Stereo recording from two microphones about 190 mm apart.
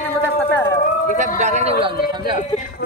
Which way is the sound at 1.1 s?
35° right (ahead or behind).